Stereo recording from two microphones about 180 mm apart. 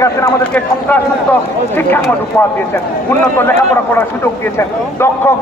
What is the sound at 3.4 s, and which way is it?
A man's voice, 10° left (ahead or behind).